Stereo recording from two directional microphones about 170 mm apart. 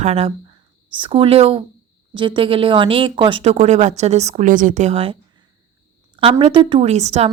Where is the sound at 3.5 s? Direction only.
45° right (ahead or behind).